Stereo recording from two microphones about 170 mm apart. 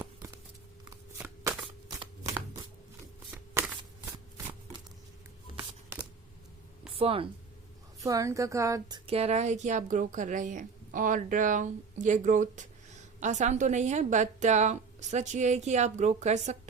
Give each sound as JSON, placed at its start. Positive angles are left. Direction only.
{"t": 2.2, "sound": "a sound", "side_deg": -20}
{"t": 3.6, "sound": "shuffling cards", "side_deg": -15}
{"t": 6.9, "sound": "speech", "side_deg": -35}
{"t": 8.0, "sound": "a woman's voice", "side_deg": -20}
{"t": 9.0, "sound": "a woman's voice", "side_deg": -35}